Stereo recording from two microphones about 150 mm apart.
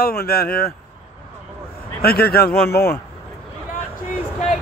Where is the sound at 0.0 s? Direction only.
90° left.